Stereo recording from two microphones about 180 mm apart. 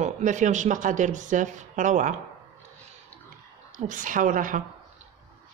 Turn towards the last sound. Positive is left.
turn(degrees=-45)  # may be behind; listen again after turning